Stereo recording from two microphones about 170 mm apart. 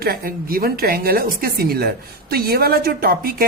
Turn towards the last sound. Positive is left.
turn(degrees=-60)  # may be behind; listen again after turning